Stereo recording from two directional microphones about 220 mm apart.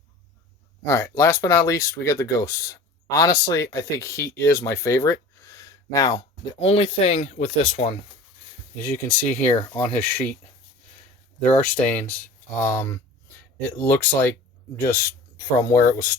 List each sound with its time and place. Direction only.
0.9 s speech: 10° left (ahead or behind)
8.8 s speech: 10° left (ahead or behind)
11.4 s speech: 5° left (ahead or behind)
15.5 s speech: 15° left (ahead or behind)